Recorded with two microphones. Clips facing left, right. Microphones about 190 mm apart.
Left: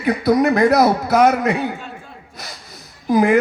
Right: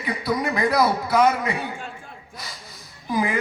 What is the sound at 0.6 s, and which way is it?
Speech, 45° left (ahead or behind).